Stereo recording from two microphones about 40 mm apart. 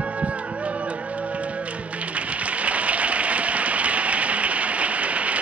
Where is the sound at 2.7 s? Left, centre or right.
Right.